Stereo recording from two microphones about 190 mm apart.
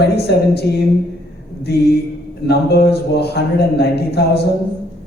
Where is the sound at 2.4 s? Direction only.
60° left (ahead or behind).